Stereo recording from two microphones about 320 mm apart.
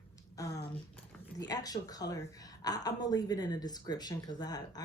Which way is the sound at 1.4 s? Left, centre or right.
Centre.